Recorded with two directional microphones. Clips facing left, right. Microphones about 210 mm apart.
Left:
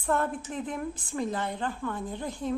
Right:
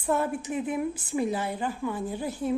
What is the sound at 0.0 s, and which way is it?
A woman's voice, 10° right (ahead or behind).